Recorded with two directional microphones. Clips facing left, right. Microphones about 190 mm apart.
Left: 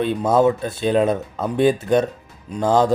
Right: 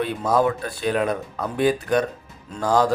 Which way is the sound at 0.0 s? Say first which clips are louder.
Left 4 dB; 25° left (ahead or behind).